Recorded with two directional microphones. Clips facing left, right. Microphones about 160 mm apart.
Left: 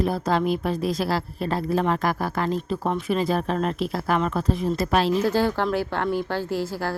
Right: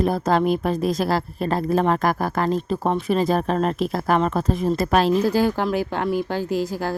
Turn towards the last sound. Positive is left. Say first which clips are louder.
# right 3 dB
turn(degrees=-15)  # may be behind; listen again after turning